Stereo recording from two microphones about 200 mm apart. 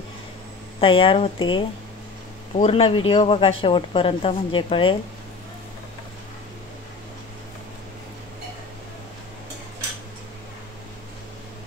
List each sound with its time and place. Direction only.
0.7 s speech: 25° left (ahead or behind)